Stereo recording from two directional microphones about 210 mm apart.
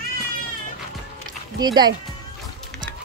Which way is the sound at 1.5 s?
20° right (ahead or behind).